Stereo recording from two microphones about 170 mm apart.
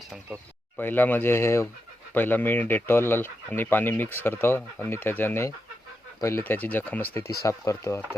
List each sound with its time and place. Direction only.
0.8 s speech: 10° left (ahead or behind)